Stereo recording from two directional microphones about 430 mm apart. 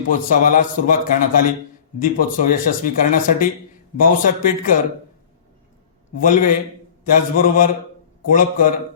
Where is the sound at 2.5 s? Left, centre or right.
Centre.